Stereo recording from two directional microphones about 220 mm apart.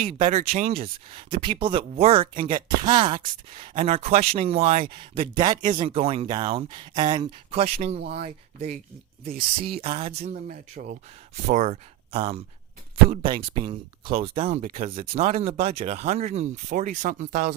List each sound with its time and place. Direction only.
0.3 s speech: 35° right (ahead or behind)
9.8 s speech: 25° right (ahead or behind)
10.5 s speech: 40° right (ahead or behind)
14.6 s speech: 40° right (ahead or behind)
15.1 s speech: 30° right (ahead or behind)